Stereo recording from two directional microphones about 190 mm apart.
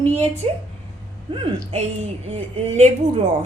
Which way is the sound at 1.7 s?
35° right (ahead or behind).